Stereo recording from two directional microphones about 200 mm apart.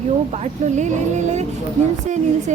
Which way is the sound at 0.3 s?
35° right (ahead or behind).